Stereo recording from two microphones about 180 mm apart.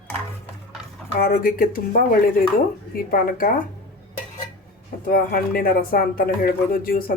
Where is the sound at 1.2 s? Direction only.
50° left (ahead or behind).